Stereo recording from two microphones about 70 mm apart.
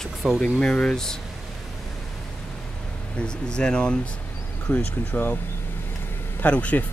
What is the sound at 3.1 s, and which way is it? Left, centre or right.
Speech, centre.